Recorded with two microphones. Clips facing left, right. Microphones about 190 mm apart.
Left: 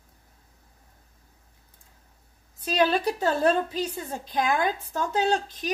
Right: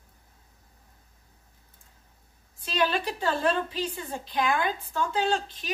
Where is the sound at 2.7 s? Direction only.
40° left (ahead or behind).